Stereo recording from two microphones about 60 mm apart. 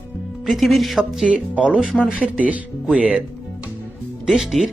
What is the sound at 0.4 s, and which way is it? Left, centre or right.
Speech, centre.